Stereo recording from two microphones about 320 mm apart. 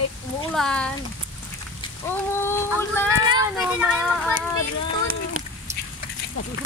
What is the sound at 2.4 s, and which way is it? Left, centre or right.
Speech, centre.